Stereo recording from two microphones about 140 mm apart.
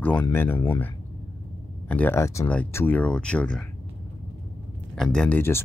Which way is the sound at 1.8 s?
10° left (ahead or behind).